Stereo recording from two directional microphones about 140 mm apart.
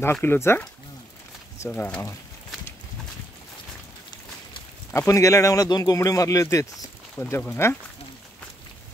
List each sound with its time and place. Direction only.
0.0 s speech: 15° left (ahead or behind)
4.9 s speech: 20° left (ahead or behind)